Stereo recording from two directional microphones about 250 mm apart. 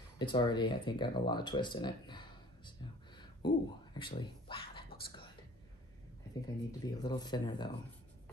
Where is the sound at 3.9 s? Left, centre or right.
Centre.